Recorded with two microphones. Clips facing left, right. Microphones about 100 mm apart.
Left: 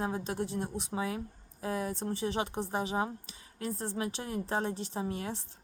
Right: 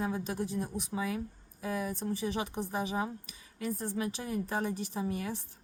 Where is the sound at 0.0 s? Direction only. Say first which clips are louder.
Even; 30° left (ahead or behind).